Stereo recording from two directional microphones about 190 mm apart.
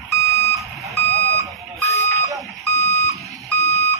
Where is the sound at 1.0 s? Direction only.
35° right (ahead or behind).